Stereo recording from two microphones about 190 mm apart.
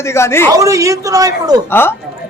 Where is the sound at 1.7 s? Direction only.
10° left (ahead or behind).